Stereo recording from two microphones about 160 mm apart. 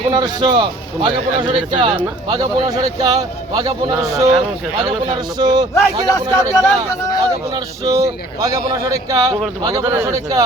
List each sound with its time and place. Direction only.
0.1 s a man's voice: 25° right (ahead or behind)
5.4 s a man's voice: 25° right (ahead or behind)
5.7 s speech: 20° left (ahead or behind)
7.5 s a man's voice: 20° right (ahead or behind)